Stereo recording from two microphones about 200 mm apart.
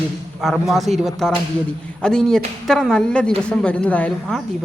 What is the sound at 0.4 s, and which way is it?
A woman's voice, centre (ahead or behind).